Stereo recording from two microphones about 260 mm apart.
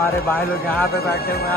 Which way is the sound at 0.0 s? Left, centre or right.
Centre.